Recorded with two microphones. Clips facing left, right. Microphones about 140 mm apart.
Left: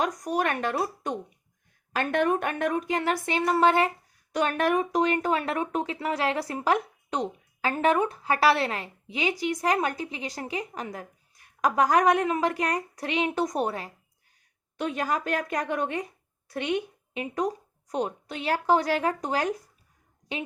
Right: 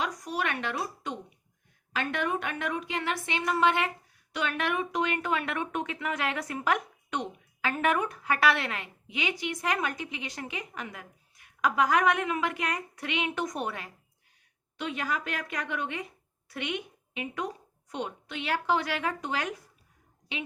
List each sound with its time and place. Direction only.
0.0 s a woman's voice: 45° left (ahead or behind)